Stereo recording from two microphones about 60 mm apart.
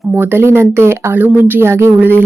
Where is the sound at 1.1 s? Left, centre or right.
Right.